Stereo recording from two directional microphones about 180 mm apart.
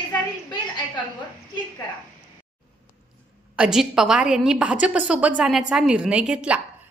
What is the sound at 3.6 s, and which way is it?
A woman's voice, 5° right (ahead or behind).